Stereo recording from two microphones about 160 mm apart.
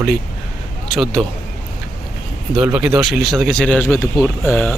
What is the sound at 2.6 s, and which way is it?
A man's voice, 5° right (ahead or behind).